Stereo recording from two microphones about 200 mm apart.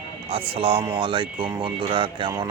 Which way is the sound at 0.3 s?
30° right (ahead or behind).